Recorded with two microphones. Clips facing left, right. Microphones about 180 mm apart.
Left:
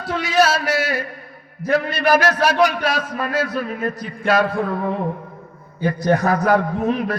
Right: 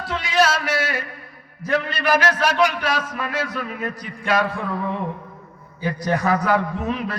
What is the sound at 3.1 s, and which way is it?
A man's voice, 40° left (ahead or behind).